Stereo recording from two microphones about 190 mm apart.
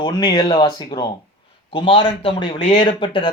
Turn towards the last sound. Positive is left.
turn(degrees=25)  # may be behind; listen again after turning